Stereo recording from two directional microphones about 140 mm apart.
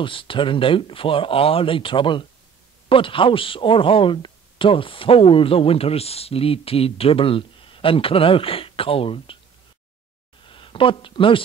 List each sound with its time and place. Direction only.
0.0 s speech: 40° left (ahead or behind)
10.4 s speech: 40° left (ahead or behind)